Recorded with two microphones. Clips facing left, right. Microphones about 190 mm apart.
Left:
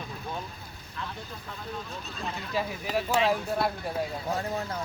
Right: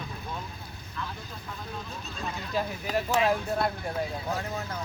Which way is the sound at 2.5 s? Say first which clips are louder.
Even; 5° left (ahead or behind).